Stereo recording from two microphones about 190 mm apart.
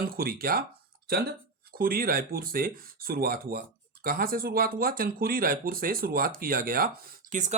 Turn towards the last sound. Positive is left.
turn(degrees=-40)  # may be behind; listen again after turning